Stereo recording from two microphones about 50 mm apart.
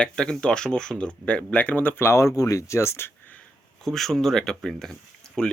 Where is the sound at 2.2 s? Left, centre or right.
Left.